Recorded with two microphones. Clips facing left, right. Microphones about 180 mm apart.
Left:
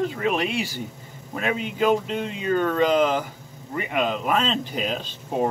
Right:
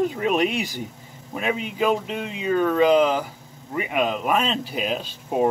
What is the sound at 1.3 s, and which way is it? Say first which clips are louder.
Speech: even; 5° right (ahead or behind).